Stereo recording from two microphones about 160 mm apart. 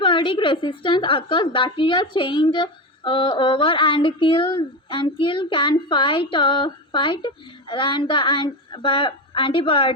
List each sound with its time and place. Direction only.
0.0 s a woman's voice: 30° left (ahead or behind)